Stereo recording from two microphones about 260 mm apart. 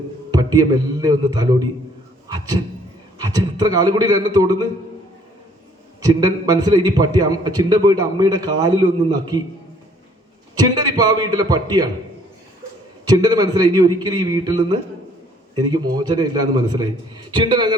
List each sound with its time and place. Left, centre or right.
0.3 s a man's voice: centre
2.2 s a sound: centre
3.2 s a man's voice: centre
6.0 s a man's voice: centre
10.5 s a man's voice: centre
13.1 s a man's voice: centre